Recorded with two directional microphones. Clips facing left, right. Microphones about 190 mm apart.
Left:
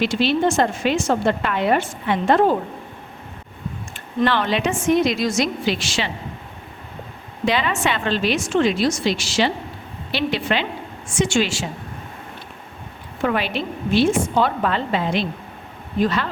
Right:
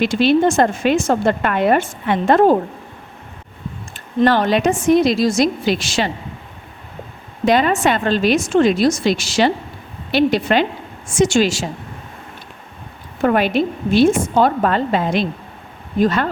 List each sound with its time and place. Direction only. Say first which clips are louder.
0.0 s a woman's voice: right 5 dB; 50° right (ahead or behind)
4.2 s a woman's voice: right 5 dB; 40° right (ahead or behind)
7.4 s a woman's voice: right 6 dB; 45° right (ahead or behind)
13.2 s a woman's voice: right 6 dB; 45° right (ahead or behind)